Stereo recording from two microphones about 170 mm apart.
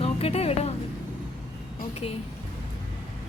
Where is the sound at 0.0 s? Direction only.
35° left (ahead or behind).